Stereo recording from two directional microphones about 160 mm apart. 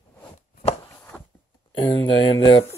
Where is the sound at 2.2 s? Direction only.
25° left (ahead or behind).